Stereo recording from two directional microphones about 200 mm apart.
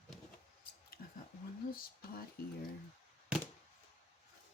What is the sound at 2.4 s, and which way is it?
Speech, 50° left (ahead or behind).